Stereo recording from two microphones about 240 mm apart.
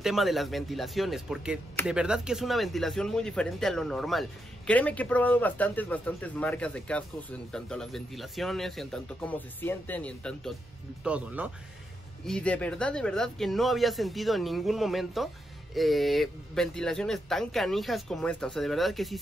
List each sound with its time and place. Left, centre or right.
0.0 s speech: centre